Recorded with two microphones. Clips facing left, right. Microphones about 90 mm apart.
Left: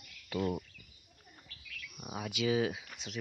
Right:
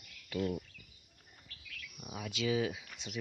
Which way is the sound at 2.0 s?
25° left (ahead or behind).